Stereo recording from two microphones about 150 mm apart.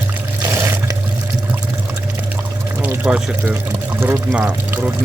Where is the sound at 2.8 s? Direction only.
10° right (ahead or behind).